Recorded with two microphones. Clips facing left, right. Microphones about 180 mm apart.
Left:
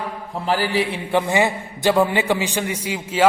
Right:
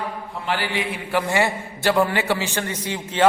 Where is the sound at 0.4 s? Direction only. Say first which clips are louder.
Left 5 dB; 35° left (ahead or behind).